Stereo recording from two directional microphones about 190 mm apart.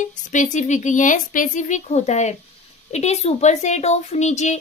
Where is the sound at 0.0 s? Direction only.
40° left (ahead or behind).